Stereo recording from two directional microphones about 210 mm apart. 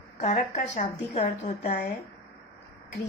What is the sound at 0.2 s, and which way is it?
A woman's voice, 35° left (ahead or behind).